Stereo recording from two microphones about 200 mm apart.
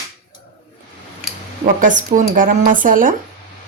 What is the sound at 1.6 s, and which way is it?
A woman's voice, 40° right (ahead or behind).